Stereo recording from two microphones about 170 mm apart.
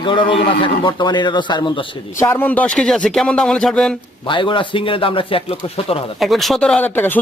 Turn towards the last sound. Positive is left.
turn(degrees=10)  # may be behind; listen again after turning